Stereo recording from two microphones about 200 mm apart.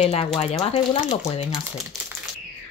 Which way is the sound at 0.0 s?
30° left (ahead or behind).